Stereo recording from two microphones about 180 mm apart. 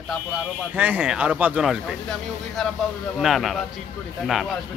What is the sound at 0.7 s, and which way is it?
A man's voice, 10° right (ahead or behind).